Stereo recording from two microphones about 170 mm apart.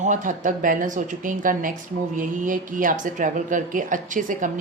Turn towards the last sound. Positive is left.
turn(degrees=-50)  # may be behind; listen again after turning